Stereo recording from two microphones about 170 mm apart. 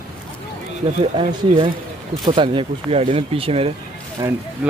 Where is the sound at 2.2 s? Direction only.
30° right (ahead or behind).